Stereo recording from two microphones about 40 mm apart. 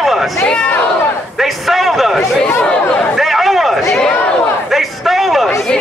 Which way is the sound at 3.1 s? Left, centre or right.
Centre.